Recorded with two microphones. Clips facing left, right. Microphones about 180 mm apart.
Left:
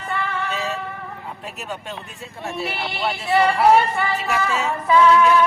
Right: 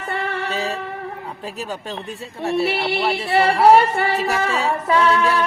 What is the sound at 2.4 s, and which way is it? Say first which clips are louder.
Music: right 7 dB; 35° right (ahead or behind).